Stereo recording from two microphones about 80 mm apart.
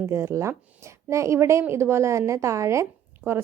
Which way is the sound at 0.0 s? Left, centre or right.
Right.